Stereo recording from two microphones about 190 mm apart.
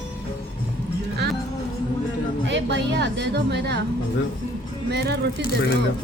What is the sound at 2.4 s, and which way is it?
A woman's voice, 65° right (ahead or behind).